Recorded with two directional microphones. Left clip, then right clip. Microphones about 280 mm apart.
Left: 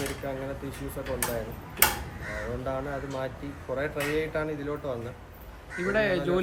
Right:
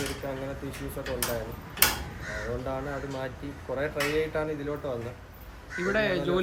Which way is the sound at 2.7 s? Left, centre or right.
Centre.